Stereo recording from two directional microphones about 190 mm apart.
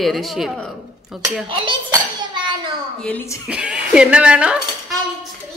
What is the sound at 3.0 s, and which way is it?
Speech, 10° left (ahead or behind).